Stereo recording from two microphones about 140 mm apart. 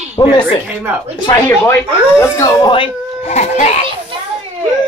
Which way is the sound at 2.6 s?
35° left (ahead or behind).